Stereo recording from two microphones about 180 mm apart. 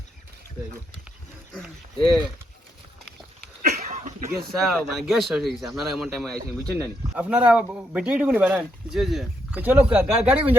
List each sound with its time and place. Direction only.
1.5 s speech: centre (ahead or behind)
3.7 s a sound: 40° right (ahead or behind)
4.5 s speech: centre (ahead or behind)